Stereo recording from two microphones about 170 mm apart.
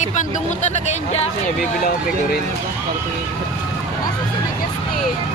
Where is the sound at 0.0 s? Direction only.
45° left (ahead or behind).